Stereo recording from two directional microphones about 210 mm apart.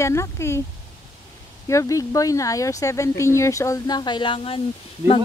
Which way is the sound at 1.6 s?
15° left (ahead or behind).